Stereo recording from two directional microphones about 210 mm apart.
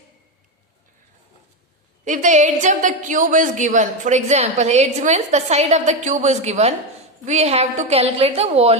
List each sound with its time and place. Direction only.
2.0 s a woman's voice: 35° right (ahead or behind)